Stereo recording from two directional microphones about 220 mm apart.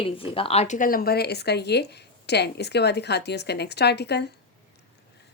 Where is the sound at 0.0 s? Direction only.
25° left (ahead or behind); by 4.3 s 50° left (ahead or behind).